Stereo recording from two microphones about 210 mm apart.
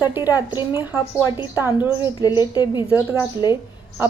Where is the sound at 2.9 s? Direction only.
10° right (ahead or behind).